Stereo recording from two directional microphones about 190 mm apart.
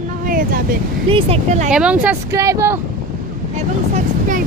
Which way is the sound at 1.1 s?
30° right (ahead or behind).